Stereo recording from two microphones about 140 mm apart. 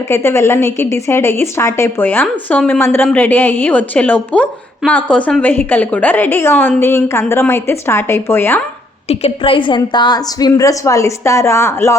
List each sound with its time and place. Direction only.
0.1 s a woman's voice: 20° left (ahead or behind)
9.0 s a woman's voice: 40° left (ahead or behind); by 11.9 s 20° left (ahead or behind)